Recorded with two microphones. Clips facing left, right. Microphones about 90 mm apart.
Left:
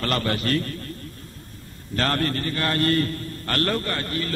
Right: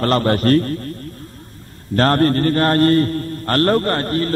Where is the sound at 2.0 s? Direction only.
40° right (ahead or behind).